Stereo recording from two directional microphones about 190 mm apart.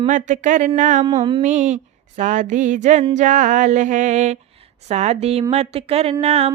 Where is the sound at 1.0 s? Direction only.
25° right (ahead or behind).